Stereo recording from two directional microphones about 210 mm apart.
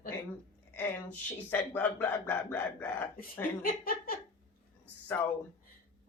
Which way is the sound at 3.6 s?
45° left (ahead or behind).